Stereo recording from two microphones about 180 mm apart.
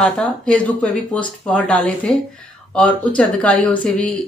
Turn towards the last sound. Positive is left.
turn(degrees=5)  # may be behind; listen again after turning